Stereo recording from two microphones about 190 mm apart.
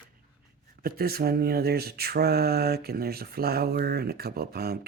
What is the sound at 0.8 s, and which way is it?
Mantra, 55° right (ahead or behind).